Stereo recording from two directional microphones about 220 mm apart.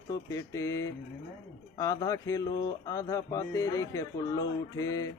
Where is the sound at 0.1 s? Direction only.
15° left (ahead or behind).